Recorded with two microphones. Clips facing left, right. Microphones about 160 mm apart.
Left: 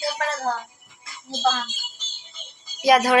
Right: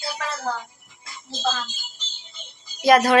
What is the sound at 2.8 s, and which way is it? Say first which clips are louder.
Speech: right 1 dB; 10° left (ahead or behind).